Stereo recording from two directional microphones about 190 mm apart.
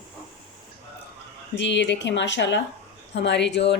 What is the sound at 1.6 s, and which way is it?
A woman's voice, 70° left (ahead or behind).